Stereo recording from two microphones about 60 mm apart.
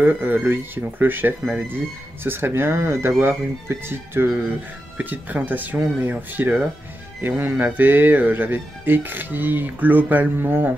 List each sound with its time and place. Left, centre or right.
0.0 s speech: right
4.9 s speech: right